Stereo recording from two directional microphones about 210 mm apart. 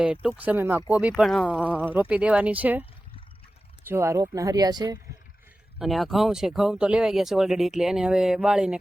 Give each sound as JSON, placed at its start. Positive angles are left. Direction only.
{"t": 0.0, "sound": "speech", "side_deg": -5}
{"t": 3.8, "sound": "speech", "side_deg": -10}
{"t": 5.8, "sound": "speech", "side_deg": 0}